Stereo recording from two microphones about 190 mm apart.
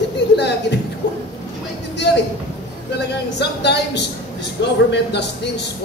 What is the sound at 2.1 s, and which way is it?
Speech, 60° left (ahead or behind).